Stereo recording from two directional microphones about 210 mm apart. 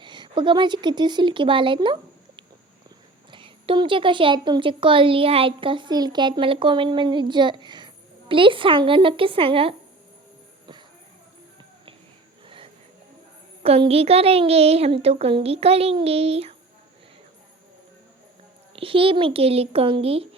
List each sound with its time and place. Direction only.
0.0 s a woman's voice: 20° right (ahead or behind)
13.6 s a woman's voice: 25° right (ahead or behind)
18.8 s a woman's voice: 25° right (ahead or behind)